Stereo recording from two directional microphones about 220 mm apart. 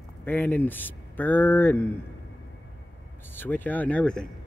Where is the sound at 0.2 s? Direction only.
10° left (ahead or behind).